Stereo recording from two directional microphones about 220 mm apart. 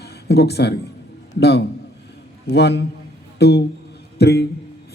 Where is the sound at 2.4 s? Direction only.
50° left (ahead or behind).